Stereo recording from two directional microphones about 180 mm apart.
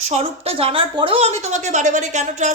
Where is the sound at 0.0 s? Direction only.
35° right (ahead or behind).